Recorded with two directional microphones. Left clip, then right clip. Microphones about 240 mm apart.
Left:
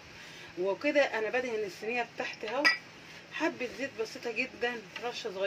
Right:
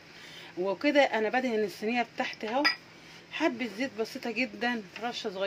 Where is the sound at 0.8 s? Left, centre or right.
Right.